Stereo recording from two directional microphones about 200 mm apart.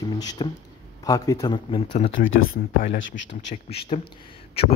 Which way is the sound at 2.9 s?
65° left (ahead or behind).